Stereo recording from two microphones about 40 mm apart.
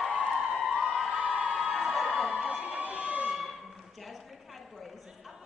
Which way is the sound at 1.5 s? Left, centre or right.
Centre.